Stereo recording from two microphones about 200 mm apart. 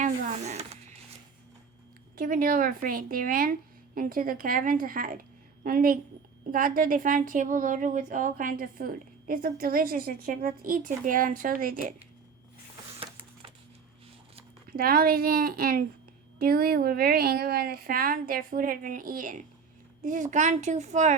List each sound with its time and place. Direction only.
0.0 s a sound: 35° right (ahead or behind)
2.1 s speech: 45° right (ahead or behind)
14.7 s a woman's voice: 45° right (ahead or behind)